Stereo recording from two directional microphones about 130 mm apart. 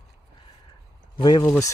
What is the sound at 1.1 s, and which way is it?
Speech, 35° left (ahead or behind).